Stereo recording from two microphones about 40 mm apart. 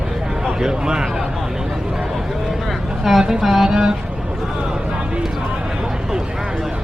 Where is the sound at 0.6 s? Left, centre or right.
Centre.